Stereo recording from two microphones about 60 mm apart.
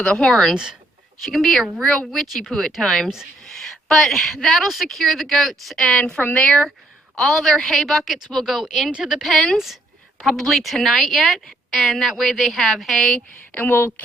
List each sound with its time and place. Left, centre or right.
0.0 s a woman's voice: centre
0.5 s speech: centre
1.2 s a woman's voice: centre; by 6.5 s left
7.2 s a woman's voice: centre
9.2 s a woman's voice: centre
13.1 s a woman's voice: left
13.7 s a woman's voice: left